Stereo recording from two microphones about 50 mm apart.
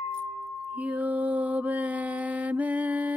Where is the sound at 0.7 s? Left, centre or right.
Right.